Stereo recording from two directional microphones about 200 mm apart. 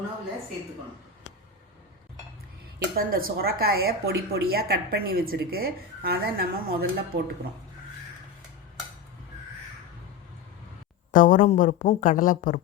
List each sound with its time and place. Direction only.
2.7 s a woman's voice: 50° right (ahead or behind)
11.1 s a woman's voice: 40° left (ahead or behind)